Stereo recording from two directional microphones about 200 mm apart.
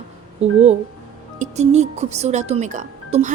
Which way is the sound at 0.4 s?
35° right (ahead or behind).